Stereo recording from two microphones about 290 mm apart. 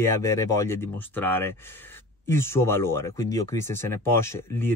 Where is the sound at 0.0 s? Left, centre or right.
Centre.